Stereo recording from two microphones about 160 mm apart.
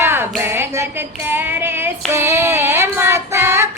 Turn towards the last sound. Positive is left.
turn(degrees=-15)  # may be behind; listen again after turning